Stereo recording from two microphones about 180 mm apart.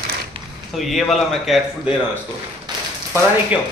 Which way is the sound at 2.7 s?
25° right (ahead or behind).